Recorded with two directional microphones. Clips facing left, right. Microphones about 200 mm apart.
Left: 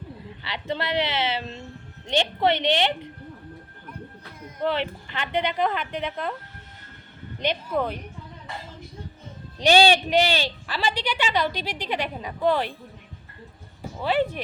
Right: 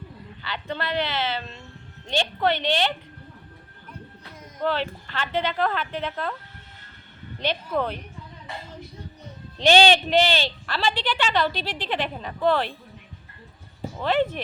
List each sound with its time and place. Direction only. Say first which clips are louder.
0.4 s a woman's voice: left 2 dB; 20° left (ahead or behind)
4.6 s speech: even; 20° left (ahead or behind)
7.3 s speech: even; 10° left (ahead or behind)
9.6 s speech: even; 10° left (ahead or behind)
14.0 s speech: right 1 dB; 10° left (ahead or behind)